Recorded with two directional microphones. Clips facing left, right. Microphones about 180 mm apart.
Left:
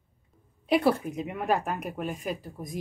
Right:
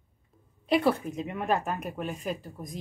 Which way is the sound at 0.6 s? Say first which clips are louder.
Left 1 dB; 5° left (ahead or behind).